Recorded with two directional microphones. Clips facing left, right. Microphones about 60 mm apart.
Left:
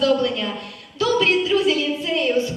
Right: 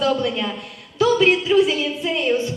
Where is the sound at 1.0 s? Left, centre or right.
Right.